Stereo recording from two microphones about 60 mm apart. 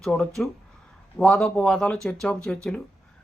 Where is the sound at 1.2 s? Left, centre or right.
Centre.